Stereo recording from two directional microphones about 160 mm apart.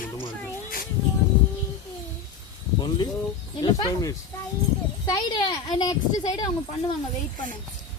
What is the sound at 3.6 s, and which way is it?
Speech, 25° left (ahead or behind).